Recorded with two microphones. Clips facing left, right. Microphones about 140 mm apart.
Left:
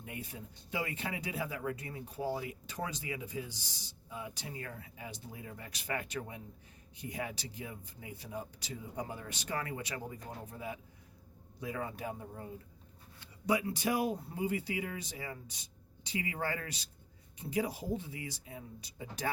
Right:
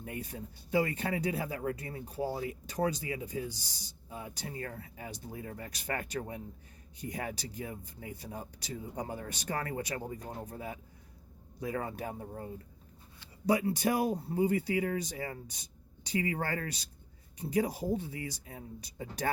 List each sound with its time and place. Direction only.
0.0 s speech: 45° right (ahead or behind)
13.5 s speech: 40° right (ahead or behind)